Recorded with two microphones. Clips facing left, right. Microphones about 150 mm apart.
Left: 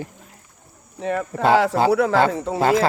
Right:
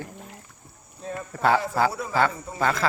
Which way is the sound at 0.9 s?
85° left.